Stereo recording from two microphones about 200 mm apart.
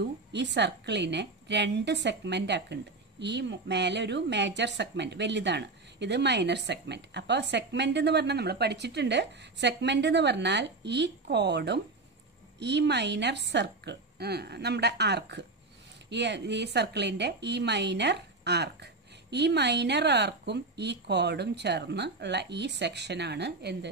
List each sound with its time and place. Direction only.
0.0 s a woman's voice: 60° right (ahead or behind)